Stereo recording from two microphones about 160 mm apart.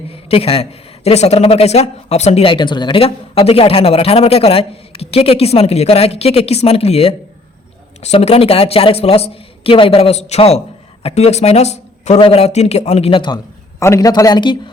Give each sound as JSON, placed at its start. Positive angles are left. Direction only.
{"t": 0.1, "sound": "speech", "side_deg": 35}
{"t": 13.7, "sound": "speech", "side_deg": 15}